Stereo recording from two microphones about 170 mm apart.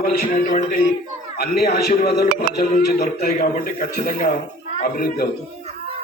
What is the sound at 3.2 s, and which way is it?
Speech, 55° left (ahead or behind).